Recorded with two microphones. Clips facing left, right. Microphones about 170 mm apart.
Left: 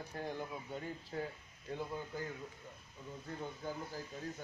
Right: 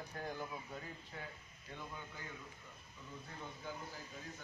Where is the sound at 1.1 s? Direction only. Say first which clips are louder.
Left 10 dB; 40° left (ahead or behind).